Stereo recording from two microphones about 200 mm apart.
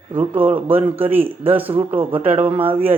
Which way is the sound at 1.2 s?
25° right (ahead or behind).